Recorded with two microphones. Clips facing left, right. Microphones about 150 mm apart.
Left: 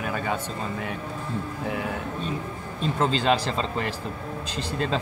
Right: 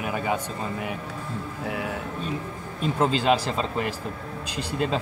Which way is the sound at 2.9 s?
10° right (ahead or behind).